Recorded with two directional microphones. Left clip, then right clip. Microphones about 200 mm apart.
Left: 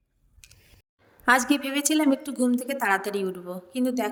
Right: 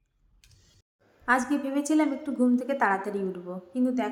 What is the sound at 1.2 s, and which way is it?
A woman's voice, 45° left (ahead or behind).